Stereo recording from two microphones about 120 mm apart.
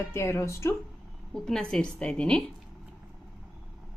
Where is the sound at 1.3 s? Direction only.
5° left (ahead or behind).